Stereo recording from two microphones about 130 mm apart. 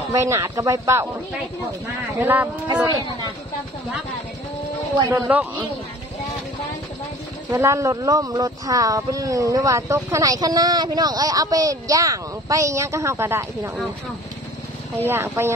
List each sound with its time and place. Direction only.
0.1 s speech: 20° right (ahead or behind)
2.1 s speech: 15° right (ahead or behind)
4.9 s speech: 25° right (ahead or behind)
7.5 s speech: 25° right (ahead or behind)
15.0 s speech: 15° right (ahead or behind)